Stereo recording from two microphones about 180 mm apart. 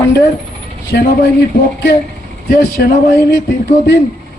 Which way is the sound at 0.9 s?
55° left (ahead or behind).